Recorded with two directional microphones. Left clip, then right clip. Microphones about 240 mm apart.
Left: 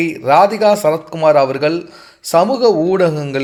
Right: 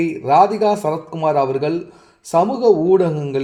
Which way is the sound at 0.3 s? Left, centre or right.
Left.